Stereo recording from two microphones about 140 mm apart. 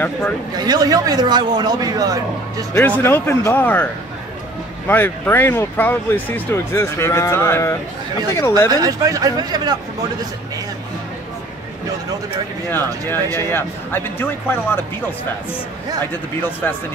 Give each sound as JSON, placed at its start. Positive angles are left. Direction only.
{"t": 0.6, "sound": "a man's voice", "side_deg": -25}
{"t": 2.7, "sound": "speech", "side_deg": 15}
{"t": 8.6, "sound": "a man's voice", "side_deg": -25}
{"t": 13.1, "sound": "speech", "side_deg": 15}